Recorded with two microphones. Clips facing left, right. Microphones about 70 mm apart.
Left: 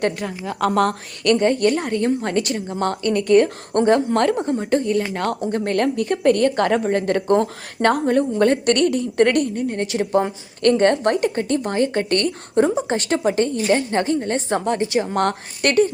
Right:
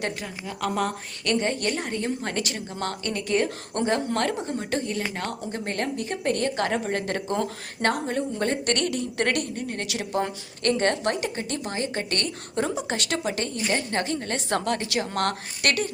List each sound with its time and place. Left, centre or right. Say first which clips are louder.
0.4 s a woman's voice: left 8 dB; left
1.5 s a woman's voice: left 9 dB; left
4.9 s a woman's voice: left 8 dB; left
6.8 s a woman's voice: left 9 dB; left